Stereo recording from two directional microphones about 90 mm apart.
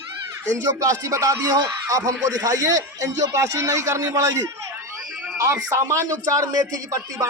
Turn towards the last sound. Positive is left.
turn(degrees=-40)  # may be behind; listen again after turning